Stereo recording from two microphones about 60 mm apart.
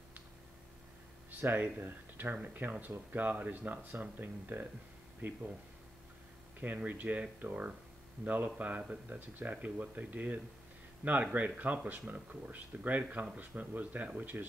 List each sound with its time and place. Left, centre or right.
1.4 s speech: right
6.6 s speech: right